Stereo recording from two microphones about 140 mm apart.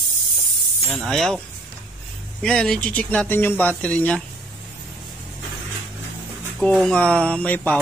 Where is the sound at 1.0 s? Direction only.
Centre (ahead or behind).